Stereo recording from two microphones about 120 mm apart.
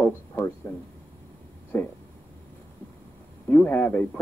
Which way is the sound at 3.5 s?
15° left (ahead or behind).